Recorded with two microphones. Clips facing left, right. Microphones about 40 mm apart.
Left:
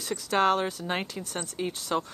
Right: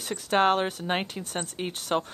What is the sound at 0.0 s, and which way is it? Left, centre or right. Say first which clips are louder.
Speech: right 1 dB; right.